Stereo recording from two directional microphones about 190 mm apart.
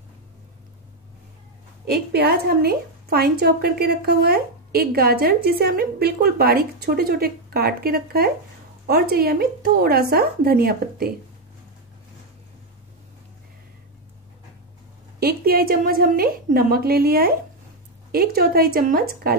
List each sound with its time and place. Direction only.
1.9 s a woman's voice: 55° right (ahead or behind)
15.1 s a woman's voice: 55° right (ahead or behind)